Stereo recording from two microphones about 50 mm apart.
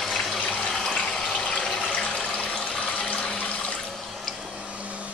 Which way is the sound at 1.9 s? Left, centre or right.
Centre.